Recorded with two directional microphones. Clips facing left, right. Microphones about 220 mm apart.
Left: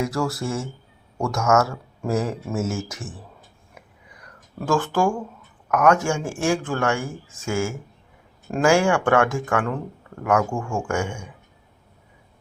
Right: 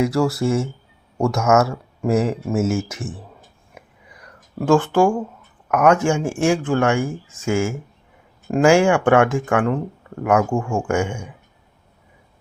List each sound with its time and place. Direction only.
0.0 s speech: 25° right (ahead or behind)
4.6 s speech: 20° right (ahead or behind)